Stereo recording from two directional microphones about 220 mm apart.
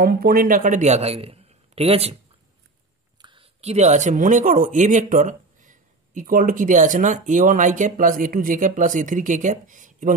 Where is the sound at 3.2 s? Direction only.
25° right (ahead or behind).